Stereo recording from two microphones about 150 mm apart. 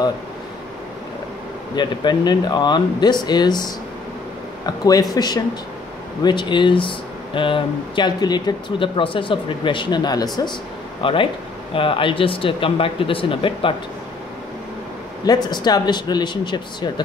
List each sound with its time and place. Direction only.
1.8 s speech: 30° left (ahead or behind)
4.6 s speech: 25° left (ahead or behind)
15.2 s speech: 30° left (ahead or behind)